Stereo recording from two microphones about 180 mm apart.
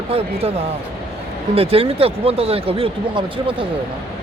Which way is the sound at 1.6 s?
30° right (ahead or behind).